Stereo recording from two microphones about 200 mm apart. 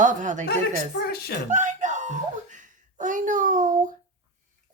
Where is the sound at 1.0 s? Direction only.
50° left (ahead or behind).